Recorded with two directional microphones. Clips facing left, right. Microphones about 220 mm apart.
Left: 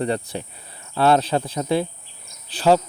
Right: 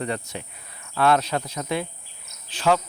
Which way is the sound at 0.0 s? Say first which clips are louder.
Left 5 dB; 35° left (ahead or behind).